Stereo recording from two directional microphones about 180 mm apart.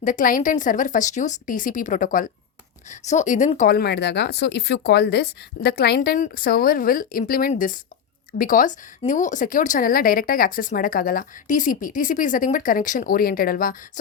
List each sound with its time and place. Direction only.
0.0 s a woman's voice: 45° left (ahead or behind)